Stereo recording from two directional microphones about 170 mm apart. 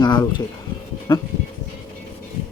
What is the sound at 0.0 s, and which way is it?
Speech, 25° left (ahead or behind).